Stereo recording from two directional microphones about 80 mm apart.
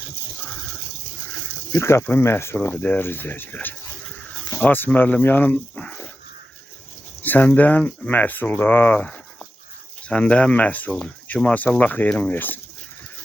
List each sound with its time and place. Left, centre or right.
1.7 s speech: left
2.6 s speech: centre
7.2 s speech: centre
9.0 s a sound: centre
10.1 s speech: centre